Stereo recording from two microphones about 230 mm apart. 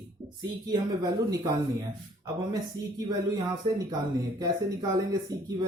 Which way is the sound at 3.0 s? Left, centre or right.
Centre.